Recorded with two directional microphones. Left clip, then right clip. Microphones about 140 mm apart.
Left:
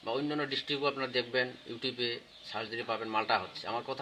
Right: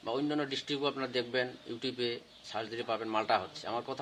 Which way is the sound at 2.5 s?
15° right (ahead or behind).